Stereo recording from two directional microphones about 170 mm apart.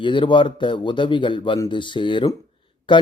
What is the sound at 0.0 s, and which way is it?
A man's voice, 30° left (ahead or behind).